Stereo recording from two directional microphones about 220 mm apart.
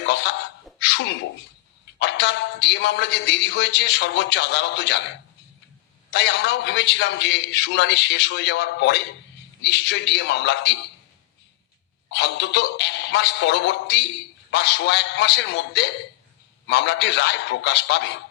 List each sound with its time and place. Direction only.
0.0 s a sound: 50° left (ahead or behind)
2.0 s a man's voice: 50° left (ahead or behind)
6.1 s a man's voice: 50° left (ahead or behind)
12.0 s a man's voice: 50° left (ahead or behind)